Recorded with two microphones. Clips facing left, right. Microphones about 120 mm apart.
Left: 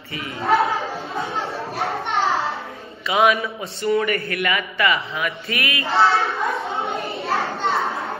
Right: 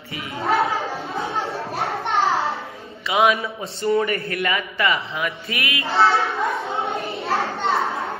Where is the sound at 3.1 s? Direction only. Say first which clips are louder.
Left 1 dB; 25° right (ahead or behind).